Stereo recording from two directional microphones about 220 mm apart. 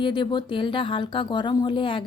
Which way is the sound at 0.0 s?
20° left (ahead or behind).